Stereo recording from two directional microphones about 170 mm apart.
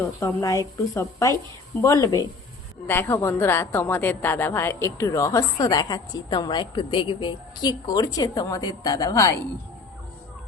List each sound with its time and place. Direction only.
0.0 s a woman's voice: 15° left (ahead or behind)